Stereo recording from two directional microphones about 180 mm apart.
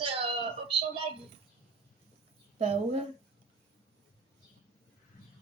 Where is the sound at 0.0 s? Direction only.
30° right (ahead or behind).